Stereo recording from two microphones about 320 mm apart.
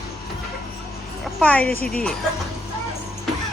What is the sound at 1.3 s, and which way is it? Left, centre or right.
Speech, centre.